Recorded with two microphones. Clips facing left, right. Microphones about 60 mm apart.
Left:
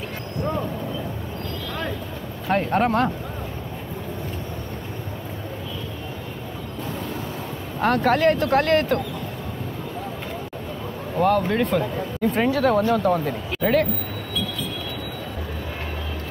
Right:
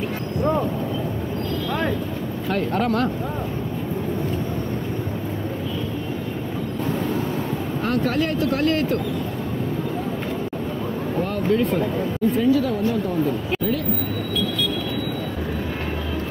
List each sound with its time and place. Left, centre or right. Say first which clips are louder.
2.5 s speech: left 2 dB; left
7.8 s speech: left 5 dB; left
11.2 s speech: left 3 dB; left